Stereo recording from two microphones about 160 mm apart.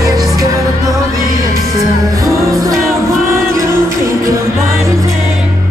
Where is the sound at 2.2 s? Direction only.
Centre (ahead or behind).